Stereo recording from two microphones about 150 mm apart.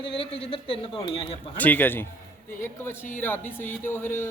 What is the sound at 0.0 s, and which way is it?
Speech, 35° left (ahead or behind).